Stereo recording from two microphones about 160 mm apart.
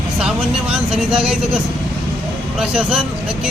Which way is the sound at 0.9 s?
35° right (ahead or behind).